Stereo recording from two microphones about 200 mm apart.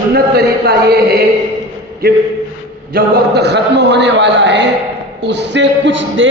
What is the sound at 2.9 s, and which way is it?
A man's voice, 50° right (ahead or behind).